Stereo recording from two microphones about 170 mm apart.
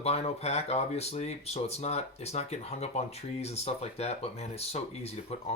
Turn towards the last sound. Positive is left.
turn(degrees=35)  # may be behind; listen again after turning